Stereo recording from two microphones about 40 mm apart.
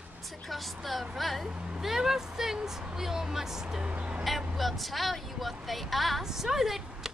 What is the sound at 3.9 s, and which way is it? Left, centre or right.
Speech, right.